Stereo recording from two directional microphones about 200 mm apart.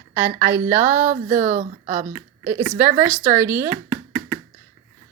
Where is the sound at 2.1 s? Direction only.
10° right (ahead or behind).